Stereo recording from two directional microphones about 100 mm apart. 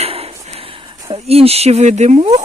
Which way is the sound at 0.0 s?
85° right.